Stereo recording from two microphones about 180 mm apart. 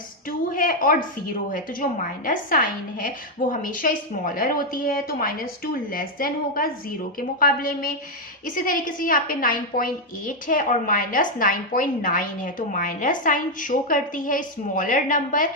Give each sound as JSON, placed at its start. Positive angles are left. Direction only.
{"t": 0.3, "sound": "a woman's voice", "side_deg": 50}